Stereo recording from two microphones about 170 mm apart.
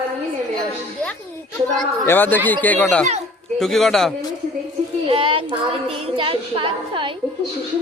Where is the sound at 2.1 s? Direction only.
10° left (ahead or behind).